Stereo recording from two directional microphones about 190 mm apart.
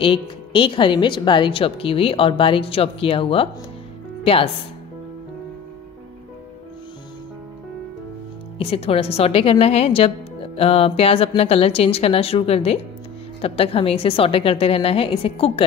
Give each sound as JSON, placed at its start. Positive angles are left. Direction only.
{"t": 0.0, "sound": "a woman's voice", "side_deg": 25}
{"t": 8.5, "sound": "a woman's voice", "side_deg": 30}